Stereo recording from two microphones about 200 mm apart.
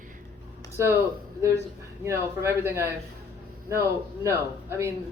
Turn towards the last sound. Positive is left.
turn(degrees=-15)  # may be behind; listen again after turning